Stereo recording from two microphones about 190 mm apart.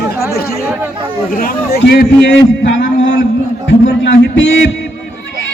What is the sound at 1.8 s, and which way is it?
Speech, 60° left (ahead or behind).